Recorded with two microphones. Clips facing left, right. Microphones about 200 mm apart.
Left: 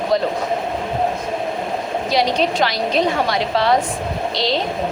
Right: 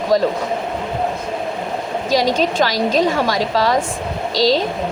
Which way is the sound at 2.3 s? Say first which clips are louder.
Right 1 dB; 45° right (ahead or behind).